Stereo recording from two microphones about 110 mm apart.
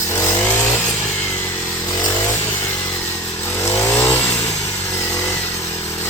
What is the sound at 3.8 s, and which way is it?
Vehicle, 20° left (ahead or behind).